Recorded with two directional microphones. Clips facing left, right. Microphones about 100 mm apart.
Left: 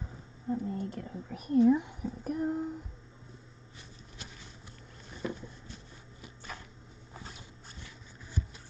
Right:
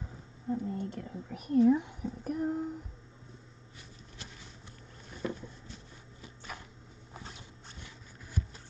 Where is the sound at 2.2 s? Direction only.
20° left (ahead or behind).